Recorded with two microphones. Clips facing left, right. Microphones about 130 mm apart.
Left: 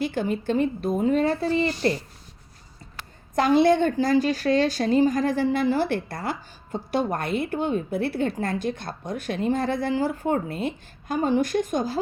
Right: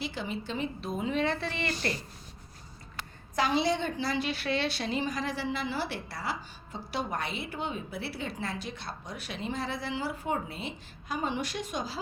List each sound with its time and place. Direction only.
0.0 s a woman's voice: 50° left (ahead or behind); by 1.9 s 35° left (ahead or behind)
3.3 s a woman's voice: 50° left (ahead or behind)